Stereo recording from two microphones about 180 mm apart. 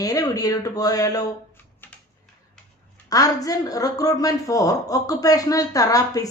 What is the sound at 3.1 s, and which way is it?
Speech, 20° left (ahead or behind).